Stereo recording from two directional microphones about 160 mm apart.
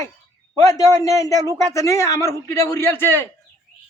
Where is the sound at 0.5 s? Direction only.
20° left (ahead or behind).